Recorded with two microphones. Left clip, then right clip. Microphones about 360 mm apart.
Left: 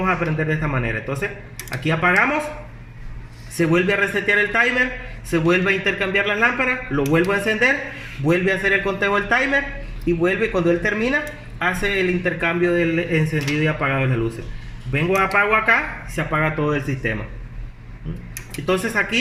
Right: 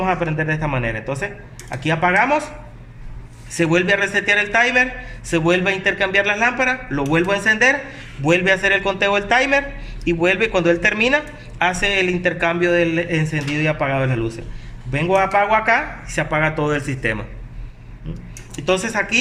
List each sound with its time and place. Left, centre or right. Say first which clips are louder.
0.0 s a man's voice: right 1 dB; right
3.6 s a man's voice: right 2 dB; right
18.6 s a man's voice: right 1 dB; right